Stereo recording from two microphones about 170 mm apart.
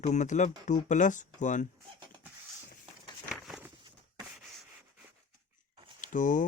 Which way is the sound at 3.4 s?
5° right (ahead or behind).